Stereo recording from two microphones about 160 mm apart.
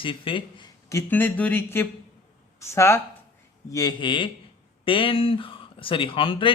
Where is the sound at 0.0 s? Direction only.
30° left (ahead or behind).